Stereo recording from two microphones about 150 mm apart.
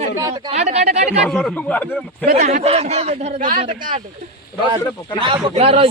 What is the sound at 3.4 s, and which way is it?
Speech, 65° right (ahead or behind).